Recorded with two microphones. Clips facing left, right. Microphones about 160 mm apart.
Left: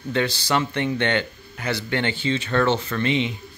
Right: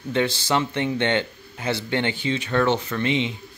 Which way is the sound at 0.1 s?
20° right (ahead or behind).